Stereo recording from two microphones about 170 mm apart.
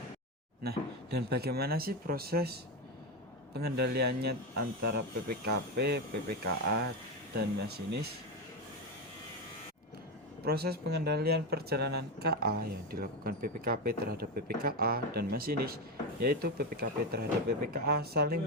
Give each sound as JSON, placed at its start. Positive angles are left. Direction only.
{"t": 0.6, "sound": "speech", "side_deg": -70}
{"t": 7.3, "sound": "speech", "side_deg": -70}
{"t": 10.4, "sound": "speech", "side_deg": -65}